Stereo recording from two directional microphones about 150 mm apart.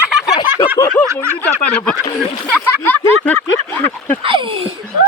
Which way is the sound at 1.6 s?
10° left (ahead or behind).